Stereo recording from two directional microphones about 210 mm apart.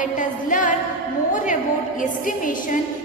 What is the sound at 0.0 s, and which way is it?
A woman's voice, 40° left (ahead or behind).